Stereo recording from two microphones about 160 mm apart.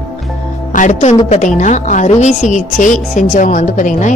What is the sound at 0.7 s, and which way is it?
Speech, 45° left (ahead or behind).